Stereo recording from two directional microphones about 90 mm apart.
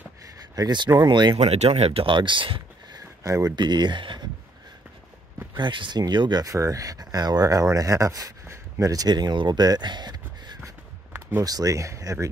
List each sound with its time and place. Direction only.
0.6 s speech: 50° right (ahead or behind); by 2.6 s 70° right (ahead or behind)
2.9 s a sound: 40° right (ahead or behind)
3.5 s speech: 55° right (ahead or behind)
5.6 s speech: 60° right (ahead or behind)
6.4 s speech: 40° right (ahead or behind); by 10.5 s 55° right (ahead or behind)
11.1 s a sound: 25° right (ahead or behind)
11.4 s speech: 40° right (ahead or behind)